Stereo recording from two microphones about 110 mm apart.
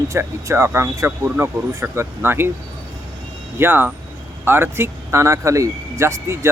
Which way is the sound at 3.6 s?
20° right (ahead or behind).